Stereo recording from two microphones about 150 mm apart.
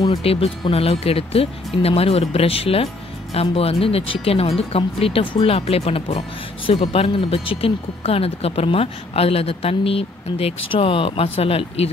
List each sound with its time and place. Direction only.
0.2 s speech: 40° left (ahead or behind)